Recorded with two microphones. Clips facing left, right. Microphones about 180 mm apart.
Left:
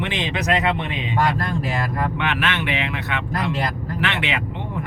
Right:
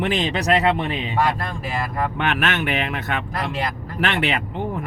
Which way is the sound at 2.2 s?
45° right (ahead or behind).